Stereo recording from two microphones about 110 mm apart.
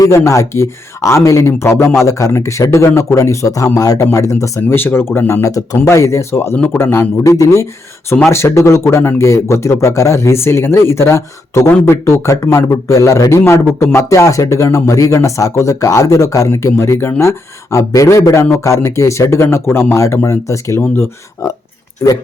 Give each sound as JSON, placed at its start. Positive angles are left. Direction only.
{"t": 0.0, "sound": "a man's voice", "side_deg": 25}